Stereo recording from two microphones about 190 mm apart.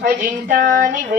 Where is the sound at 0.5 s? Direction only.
45° right (ahead or behind).